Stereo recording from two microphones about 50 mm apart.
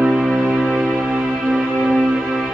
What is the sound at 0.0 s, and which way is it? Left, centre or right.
Music, centre.